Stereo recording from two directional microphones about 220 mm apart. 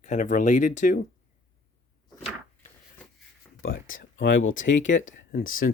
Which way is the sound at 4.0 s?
55° left (ahead or behind).